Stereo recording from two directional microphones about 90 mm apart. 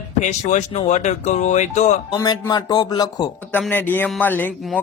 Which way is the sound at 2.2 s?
50° left (ahead or behind).